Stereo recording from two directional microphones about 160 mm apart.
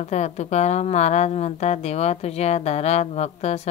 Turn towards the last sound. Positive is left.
turn(degrees=40)  # may be behind; listen again after turning